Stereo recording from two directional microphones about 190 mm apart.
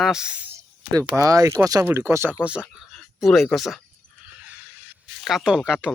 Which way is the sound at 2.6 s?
Centre (ahead or behind).